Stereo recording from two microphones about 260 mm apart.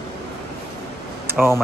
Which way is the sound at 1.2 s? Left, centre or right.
Centre.